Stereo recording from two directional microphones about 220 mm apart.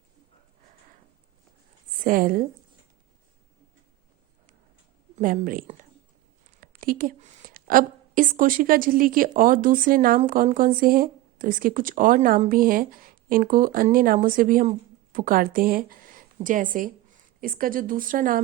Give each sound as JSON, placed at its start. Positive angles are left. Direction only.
{"t": 2.0, "sound": "a woman's voice", "side_deg": -40}
{"t": 5.1, "sound": "a woman's voice", "side_deg": -40}